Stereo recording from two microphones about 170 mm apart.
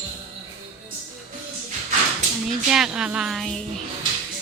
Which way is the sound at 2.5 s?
5° right (ahead or behind).